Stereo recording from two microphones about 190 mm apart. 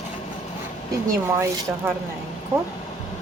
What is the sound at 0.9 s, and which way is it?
Speech, 15° right (ahead or behind).